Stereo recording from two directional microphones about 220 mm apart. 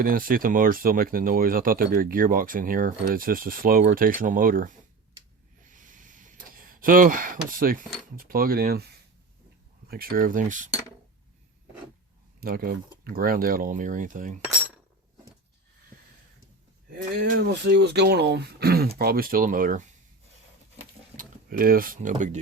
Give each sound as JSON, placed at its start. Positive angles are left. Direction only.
{"t": 0.0, "sound": "speech", "side_deg": -40}
{"t": 5.6, "sound": "a sound", "side_deg": -35}
{"t": 8.1, "sound": "speech", "side_deg": -40}
{"t": 9.9, "sound": "speech", "side_deg": -45}
{"t": 12.4, "sound": "speech", "side_deg": -45}
{"t": 17.4, "sound": "speech", "side_deg": -50}
{"t": 21.2, "sound": "speech", "side_deg": -40}